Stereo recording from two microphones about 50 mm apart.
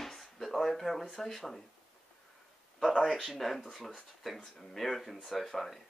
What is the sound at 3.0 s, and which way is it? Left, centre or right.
Speech, centre.